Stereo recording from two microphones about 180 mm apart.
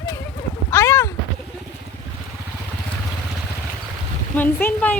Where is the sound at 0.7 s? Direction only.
15° left (ahead or behind).